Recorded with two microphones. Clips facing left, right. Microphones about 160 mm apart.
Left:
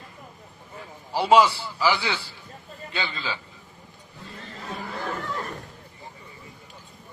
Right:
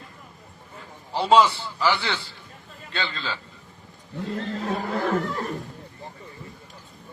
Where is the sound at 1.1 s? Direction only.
10° left (ahead or behind).